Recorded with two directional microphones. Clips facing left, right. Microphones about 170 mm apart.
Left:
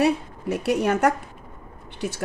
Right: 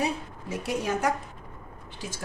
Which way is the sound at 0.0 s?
65° left (ahead or behind).